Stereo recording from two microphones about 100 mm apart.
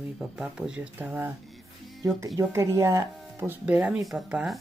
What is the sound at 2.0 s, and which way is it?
Speech, 35° right (ahead or behind).